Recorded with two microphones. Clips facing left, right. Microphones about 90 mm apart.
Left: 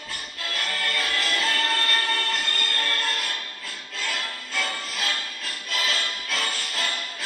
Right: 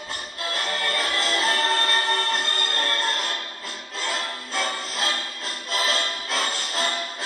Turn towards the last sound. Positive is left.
turn(degrees=-30)  # may be behind; listen again after turning